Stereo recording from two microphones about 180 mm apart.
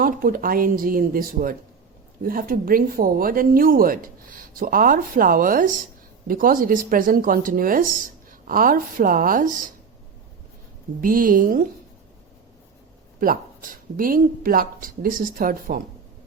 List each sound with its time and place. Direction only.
0.0 s speech: 55° right (ahead or behind)
11.0 s speech: 50° right (ahead or behind)
13.1 s speech: 50° right (ahead or behind)